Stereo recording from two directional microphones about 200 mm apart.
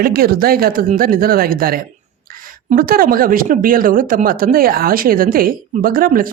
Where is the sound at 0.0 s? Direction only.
50° right (ahead or behind).